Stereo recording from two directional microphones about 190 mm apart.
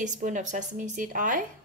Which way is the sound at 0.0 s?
40° right (ahead or behind).